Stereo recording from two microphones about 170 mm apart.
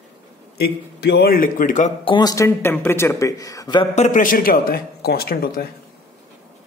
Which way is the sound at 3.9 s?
50° left (ahead or behind).